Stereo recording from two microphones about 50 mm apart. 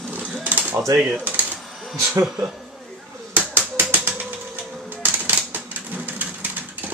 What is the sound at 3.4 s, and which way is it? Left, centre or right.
Ratchet, right.